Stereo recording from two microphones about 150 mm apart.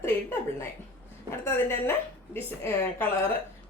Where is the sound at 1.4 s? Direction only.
15° left (ahead or behind).